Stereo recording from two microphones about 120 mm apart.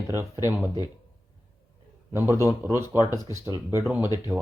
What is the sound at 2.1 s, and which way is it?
Speech, 20° right (ahead or behind).